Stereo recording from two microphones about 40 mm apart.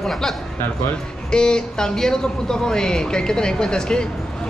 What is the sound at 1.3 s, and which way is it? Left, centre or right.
Speech, left.